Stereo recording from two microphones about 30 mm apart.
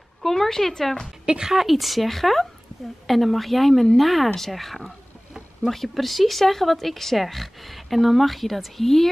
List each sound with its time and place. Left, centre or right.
0.2 s a woman's voice: centre
1.4 s a woman's voice: centre